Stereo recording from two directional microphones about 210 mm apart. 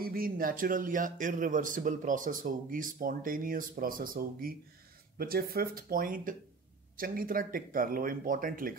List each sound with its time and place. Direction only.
0.0 s a man's voice: 45° right (ahead or behind)